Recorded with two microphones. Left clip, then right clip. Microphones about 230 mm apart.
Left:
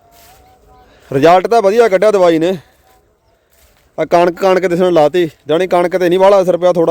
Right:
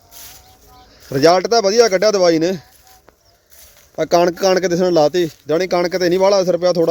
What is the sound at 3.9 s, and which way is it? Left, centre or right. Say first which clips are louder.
A man's voice: left 3 dB; centre.